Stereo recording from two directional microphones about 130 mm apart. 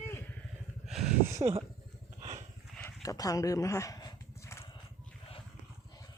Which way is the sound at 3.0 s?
25° left (ahead or behind).